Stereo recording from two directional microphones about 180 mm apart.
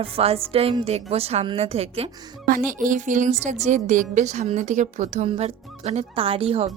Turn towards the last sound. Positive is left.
turn(degrees=-30)  # may be behind; listen again after turning